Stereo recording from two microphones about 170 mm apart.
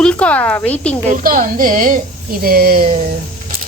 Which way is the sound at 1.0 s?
50° right (ahead or behind).